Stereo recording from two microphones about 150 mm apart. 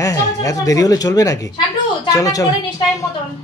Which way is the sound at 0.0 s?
20° left (ahead or behind).